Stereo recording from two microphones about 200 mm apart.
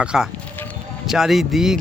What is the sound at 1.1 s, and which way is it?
Speech, centre (ahead or behind).